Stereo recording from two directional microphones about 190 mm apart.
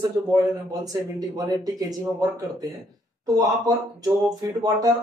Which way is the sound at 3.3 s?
20° right (ahead or behind).